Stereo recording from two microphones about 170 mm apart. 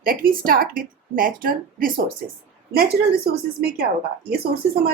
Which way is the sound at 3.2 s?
65° right (ahead or behind).